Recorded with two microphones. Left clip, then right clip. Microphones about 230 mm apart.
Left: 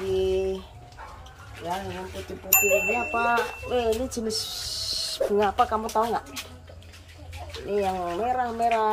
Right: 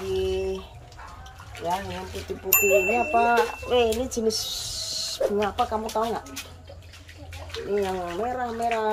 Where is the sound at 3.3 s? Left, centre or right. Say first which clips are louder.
Right 3 dB; centre.